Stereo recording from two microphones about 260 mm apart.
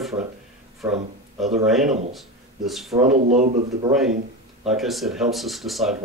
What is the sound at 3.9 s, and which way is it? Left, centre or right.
Speech, centre.